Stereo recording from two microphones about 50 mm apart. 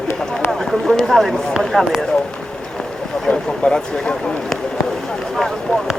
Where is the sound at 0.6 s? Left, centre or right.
Centre.